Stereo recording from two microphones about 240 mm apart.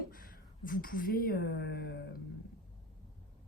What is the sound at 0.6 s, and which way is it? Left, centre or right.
A woman's voice, left.